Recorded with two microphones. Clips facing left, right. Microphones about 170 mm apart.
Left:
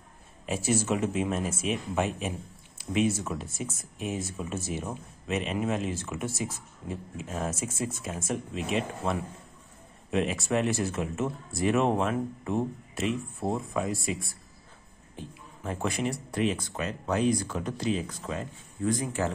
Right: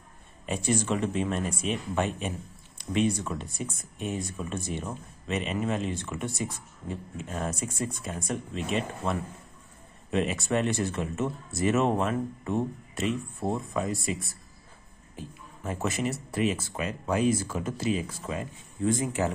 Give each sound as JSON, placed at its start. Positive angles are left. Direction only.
{"t": 0.5, "sound": "speech", "side_deg": 5}
{"t": 18.8, "sound": "speech", "side_deg": -25}